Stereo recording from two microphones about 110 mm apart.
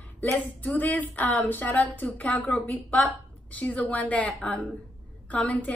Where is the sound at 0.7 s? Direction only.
15° left (ahead or behind).